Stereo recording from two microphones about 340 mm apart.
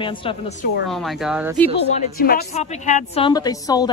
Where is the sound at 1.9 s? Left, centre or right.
Left.